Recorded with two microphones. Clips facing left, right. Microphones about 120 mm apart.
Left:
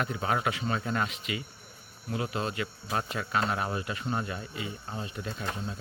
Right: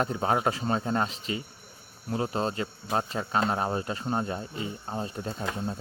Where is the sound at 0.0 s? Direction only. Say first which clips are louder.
Right 4 dB; 35° right (ahead or behind).